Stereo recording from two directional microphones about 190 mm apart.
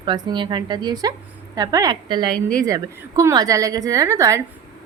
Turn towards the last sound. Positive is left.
turn(degrees=-15)  # may be behind; listen again after turning